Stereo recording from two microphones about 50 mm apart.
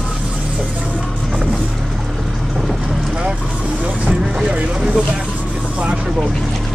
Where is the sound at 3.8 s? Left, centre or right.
Right.